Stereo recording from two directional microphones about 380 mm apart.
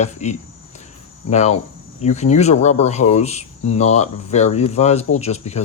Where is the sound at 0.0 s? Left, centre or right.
Centre.